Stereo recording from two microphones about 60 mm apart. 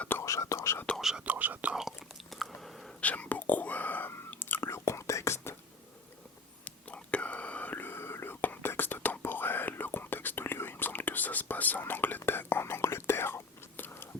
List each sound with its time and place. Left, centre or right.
0.1 s whispering: left
1.2 s whispering: right
1.7 s whispering: centre
2.6 s whispering: centre
3.0 s whispering: left
4.7 s whispering: left
6.7 s whispering: centre
7.9 s whispering: left